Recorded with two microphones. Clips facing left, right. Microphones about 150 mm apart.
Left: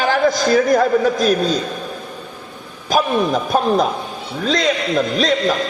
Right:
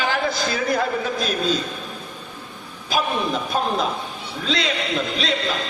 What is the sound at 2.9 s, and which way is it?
Speech, 45° left (ahead or behind).